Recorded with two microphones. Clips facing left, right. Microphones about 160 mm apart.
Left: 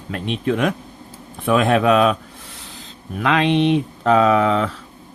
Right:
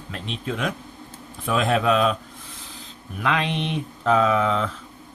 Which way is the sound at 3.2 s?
80° left.